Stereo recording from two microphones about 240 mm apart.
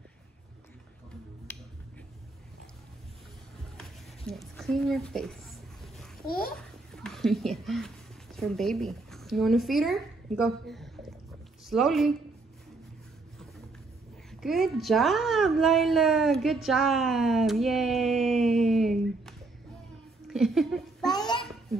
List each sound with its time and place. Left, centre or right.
1.5 s finger snapping: centre
4.3 s speech: centre
6.2 s a child's voice: left
6.6 s speech: centre
14.4 s speech: centre
20.2 s a sound: centre
21.1 s babbling: centre